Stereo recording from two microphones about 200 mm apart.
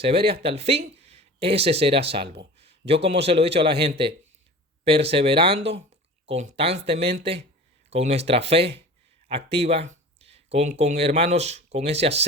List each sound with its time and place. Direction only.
0.0 s a man's voice: 30° right (ahead or behind)
2.2 s speech: 55° right (ahead or behind)
2.6 s a man's voice: 30° right (ahead or behind)